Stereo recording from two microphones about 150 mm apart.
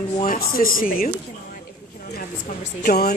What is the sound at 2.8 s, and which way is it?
Speech, 90° left.